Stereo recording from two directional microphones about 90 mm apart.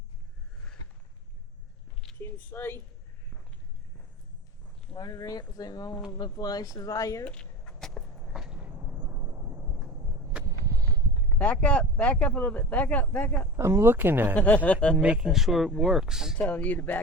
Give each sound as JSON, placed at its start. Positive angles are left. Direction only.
{"t": 2.2, "sound": "speech", "side_deg": 25}
{"t": 4.9, "sound": "speech", "side_deg": 45}
{"t": 7.3, "sound": "vehicle", "side_deg": 10}
{"t": 8.5, "sound": "vehicle", "side_deg": -20}
{"t": 8.8, "sound": "vehicle", "side_deg": -30}
{"t": 10.4, "sound": "a sound", "side_deg": -40}
{"t": 11.3, "sound": "speech", "side_deg": 15}
{"t": 13.6, "sound": "speech", "side_deg": -30}
{"t": 14.3, "sound": "speech", "side_deg": 15}
{"t": 14.9, "sound": "speech", "side_deg": -10}
{"t": 16.5, "sound": "speech", "side_deg": 20}